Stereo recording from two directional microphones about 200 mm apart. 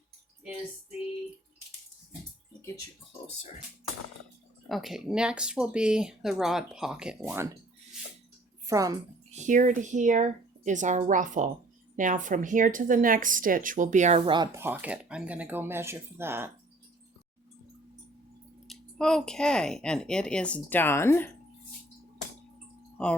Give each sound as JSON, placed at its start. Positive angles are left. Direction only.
{"t": 4.7, "sound": "speech", "side_deg": 0}
{"t": 8.6, "sound": "a woman's voice", "side_deg": -15}
{"t": 9.3, "sound": "a woman's voice", "side_deg": -40}
{"t": 18.7, "sound": "speech", "side_deg": 0}
{"t": 23.0, "sound": "speech", "side_deg": 5}